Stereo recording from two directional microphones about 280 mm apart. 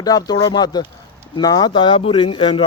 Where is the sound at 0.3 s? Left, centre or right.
Centre.